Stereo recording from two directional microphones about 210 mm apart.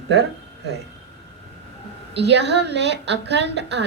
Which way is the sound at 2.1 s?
55° right (ahead or behind).